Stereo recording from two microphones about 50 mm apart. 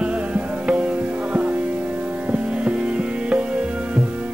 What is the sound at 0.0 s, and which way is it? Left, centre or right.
Music, right.